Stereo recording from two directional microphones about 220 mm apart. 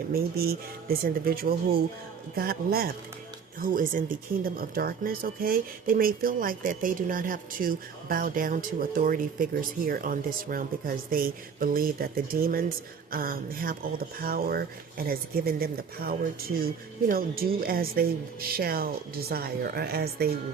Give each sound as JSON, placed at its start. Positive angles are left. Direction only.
{"t": 0.1, "sound": "speech", "side_deg": -45}